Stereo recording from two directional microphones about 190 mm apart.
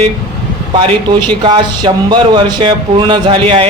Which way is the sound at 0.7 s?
25° right (ahead or behind).